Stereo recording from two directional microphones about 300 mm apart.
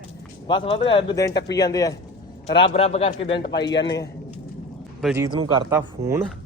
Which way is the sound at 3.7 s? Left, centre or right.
Left.